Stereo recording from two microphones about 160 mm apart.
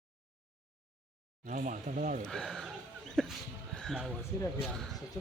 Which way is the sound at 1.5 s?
55° right (ahead or behind).